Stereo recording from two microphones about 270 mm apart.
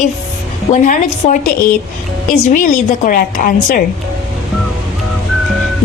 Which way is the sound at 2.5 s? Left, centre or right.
Left.